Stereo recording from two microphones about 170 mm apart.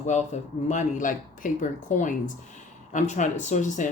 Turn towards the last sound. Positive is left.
turn(degrees=45)  # may be behind; listen again after turning